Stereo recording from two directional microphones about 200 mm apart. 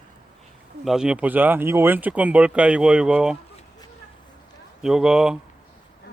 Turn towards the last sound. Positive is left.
turn(degrees=-5)  # may be behind; listen again after turning